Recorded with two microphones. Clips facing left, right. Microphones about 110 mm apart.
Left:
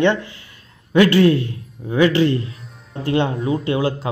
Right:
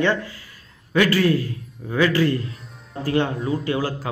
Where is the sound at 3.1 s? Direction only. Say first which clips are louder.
Left 2 dB; 20° left (ahead or behind).